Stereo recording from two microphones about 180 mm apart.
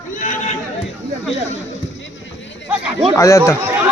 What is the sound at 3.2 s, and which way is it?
Speech, 15° left (ahead or behind).